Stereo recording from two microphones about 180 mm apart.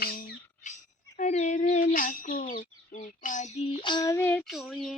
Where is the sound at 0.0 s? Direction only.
55° left (ahead or behind).